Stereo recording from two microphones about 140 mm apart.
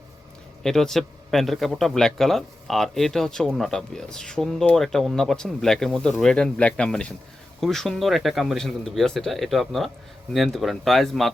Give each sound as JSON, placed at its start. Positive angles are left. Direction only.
{"t": 0.6, "sound": "speech", "side_deg": 5}